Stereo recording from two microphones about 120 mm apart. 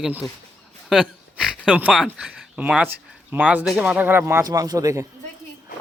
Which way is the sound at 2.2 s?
10° right (ahead or behind).